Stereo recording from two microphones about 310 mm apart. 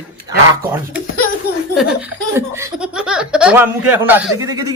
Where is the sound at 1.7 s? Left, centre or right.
Centre.